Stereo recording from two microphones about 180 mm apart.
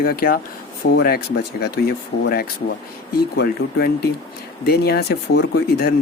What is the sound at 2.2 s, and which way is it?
Speech, 60° left (ahead or behind).